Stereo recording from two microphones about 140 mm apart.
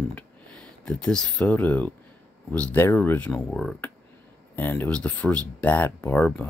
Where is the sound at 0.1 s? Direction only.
5° left (ahead or behind).